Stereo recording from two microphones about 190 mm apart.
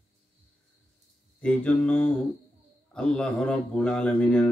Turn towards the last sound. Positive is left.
turn(degrees=5)  # may be behind; listen again after turning